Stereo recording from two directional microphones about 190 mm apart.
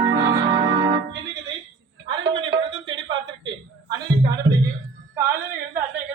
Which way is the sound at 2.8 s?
25° right (ahead or behind).